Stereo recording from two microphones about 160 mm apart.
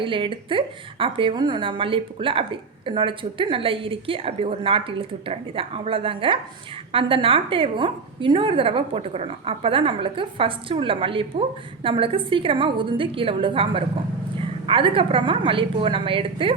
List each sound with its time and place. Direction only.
0.0 s a woman's voice: 30° right (ahead or behind)